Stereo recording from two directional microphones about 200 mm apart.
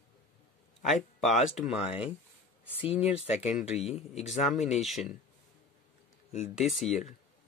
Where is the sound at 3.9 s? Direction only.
30° left (ahead or behind).